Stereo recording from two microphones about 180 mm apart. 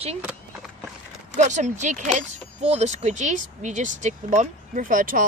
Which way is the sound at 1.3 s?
40° right (ahead or behind).